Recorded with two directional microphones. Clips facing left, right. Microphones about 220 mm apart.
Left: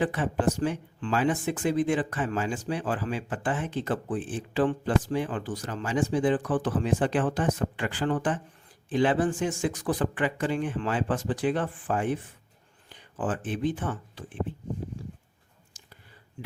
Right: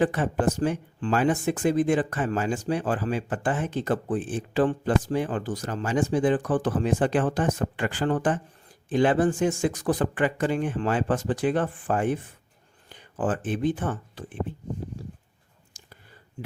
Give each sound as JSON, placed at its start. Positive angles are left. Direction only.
{"t": 0.0, "sound": "speech", "side_deg": -45}
{"t": 13.1, "sound": "speech", "side_deg": -45}
{"t": 15.7, "sound": "whispering", "side_deg": -45}